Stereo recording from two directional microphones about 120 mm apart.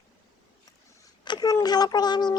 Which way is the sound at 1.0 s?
35° left (ahead or behind).